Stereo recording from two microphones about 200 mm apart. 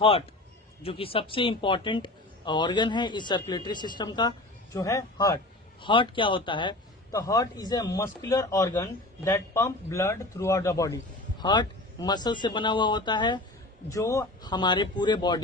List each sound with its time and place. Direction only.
0.0 s speech: 30° left (ahead or behind)